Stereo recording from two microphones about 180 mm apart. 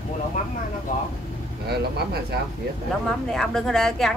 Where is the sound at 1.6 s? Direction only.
65° right (ahead or behind).